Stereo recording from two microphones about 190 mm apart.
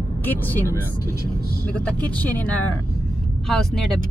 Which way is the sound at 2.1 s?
10° left (ahead or behind).